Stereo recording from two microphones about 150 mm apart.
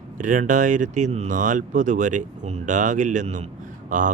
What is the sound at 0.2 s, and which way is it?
Speech, 60° right (ahead or behind).